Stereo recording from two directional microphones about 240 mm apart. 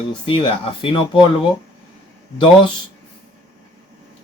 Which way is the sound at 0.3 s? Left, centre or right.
Left.